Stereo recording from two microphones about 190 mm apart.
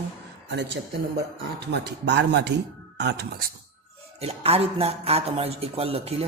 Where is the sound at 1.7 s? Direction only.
65° right (ahead or behind).